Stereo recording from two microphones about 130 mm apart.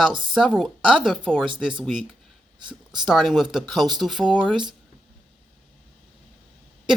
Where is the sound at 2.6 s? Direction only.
35° right (ahead or behind).